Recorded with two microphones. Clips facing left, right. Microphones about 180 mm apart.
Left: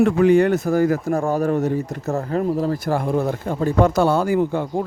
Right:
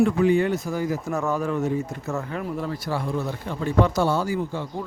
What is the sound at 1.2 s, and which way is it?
Speech, 35° left (ahead or behind).